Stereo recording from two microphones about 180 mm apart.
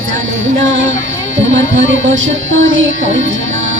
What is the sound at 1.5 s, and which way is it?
Music, 90° right.